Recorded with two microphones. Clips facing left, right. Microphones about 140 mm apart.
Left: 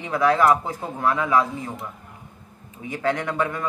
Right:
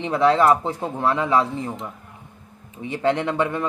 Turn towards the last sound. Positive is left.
turn(degrees=-25)  # may be behind; listen again after turning